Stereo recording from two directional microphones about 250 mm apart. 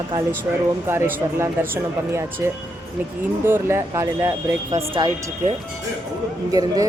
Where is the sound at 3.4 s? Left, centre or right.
Centre.